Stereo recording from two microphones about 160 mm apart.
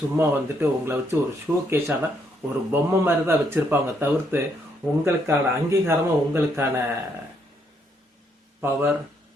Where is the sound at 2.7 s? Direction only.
15° right (ahead or behind).